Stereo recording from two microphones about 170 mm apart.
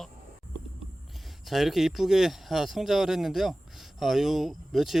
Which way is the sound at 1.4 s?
Centre (ahead or behind).